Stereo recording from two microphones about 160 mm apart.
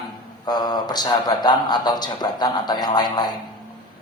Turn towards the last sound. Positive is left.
turn(degrees=25)  # may be behind; listen again after turning